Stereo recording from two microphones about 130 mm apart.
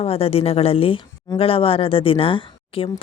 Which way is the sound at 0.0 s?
50° left (ahead or behind).